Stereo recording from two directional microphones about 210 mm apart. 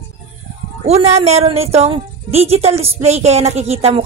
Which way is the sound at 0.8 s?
30° right (ahead or behind).